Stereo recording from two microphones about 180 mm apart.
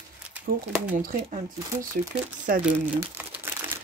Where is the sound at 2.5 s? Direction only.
55° right (ahead or behind).